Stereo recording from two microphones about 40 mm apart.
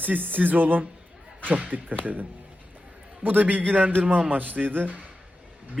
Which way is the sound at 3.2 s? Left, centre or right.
Right.